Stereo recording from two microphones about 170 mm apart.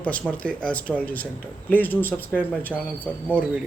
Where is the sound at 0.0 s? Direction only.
10° left (ahead or behind).